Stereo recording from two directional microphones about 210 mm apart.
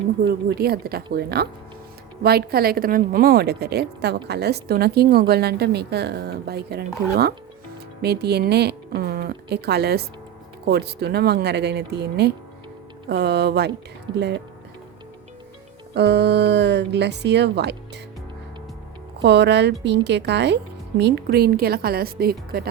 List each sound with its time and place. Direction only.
0.3 s a woman's voice: 45° right (ahead or behind)
14.1 s speech: 20° right (ahead or behind)
16.0 s a woman's voice: 55° right (ahead or behind)
19.2 s a woman's voice: 55° right (ahead or behind)